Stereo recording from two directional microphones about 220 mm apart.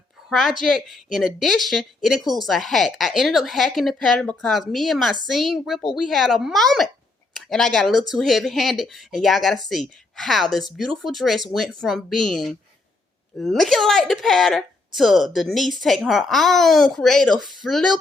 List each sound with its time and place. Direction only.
0.3 s a woman's voice: centre (ahead or behind)